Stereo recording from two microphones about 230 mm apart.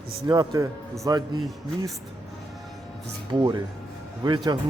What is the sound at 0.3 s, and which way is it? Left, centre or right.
Speech, centre.